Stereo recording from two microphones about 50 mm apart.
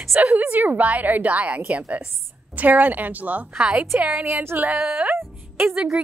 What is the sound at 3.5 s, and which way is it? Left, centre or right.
Speech, right.